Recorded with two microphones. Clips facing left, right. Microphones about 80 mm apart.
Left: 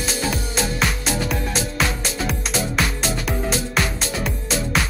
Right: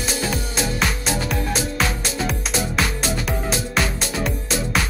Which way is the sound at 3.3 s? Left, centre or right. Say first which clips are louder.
Left 1 dB; centre.